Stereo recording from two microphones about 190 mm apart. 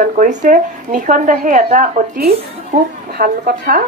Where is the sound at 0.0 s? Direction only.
40° right (ahead or behind).